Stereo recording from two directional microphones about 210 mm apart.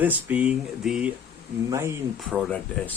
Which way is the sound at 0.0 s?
10° right (ahead or behind).